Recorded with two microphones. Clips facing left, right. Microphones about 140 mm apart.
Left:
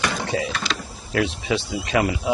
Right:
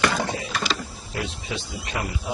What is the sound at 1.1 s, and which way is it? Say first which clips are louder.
Speech: left 9 dB; 85° left.